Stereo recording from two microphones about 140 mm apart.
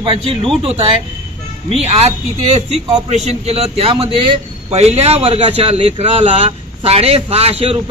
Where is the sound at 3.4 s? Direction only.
45° right (ahead or behind).